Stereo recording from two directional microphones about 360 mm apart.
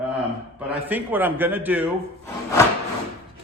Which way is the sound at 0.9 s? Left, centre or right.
Centre.